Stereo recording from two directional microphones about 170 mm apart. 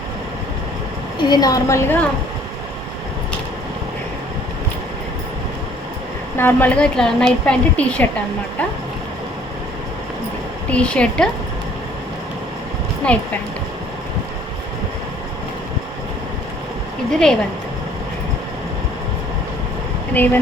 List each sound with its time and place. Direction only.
1.3 s a woman's voice: 20° left (ahead or behind)
6.3 s a woman's voice: 10° left (ahead or behind)
10.7 s a woman's voice: 5° left (ahead or behind)
13.1 s a woman's voice: 5° left (ahead or behind)
17.1 s a woman's voice: 5° left (ahead or behind)
20.1 s a woman's voice: 10° left (ahead or behind)